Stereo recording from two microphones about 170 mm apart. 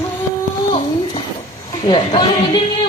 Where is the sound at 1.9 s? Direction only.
30° left (ahead or behind).